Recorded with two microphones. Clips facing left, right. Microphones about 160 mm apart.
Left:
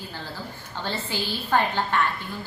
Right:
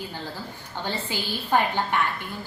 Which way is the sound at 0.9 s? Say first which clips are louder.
Left 1 dB; 15° right (ahead or behind).